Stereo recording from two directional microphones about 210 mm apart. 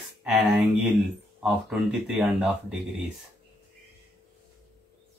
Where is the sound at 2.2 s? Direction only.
5° right (ahead or behind).